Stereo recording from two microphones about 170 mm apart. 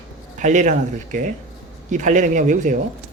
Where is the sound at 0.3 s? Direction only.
45° right (ahead or behind).